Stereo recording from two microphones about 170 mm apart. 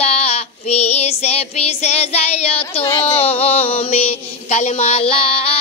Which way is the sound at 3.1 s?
35° left (ahead or behind).